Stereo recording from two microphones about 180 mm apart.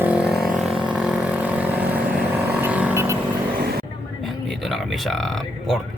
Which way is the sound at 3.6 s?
60° right (ahead or behind).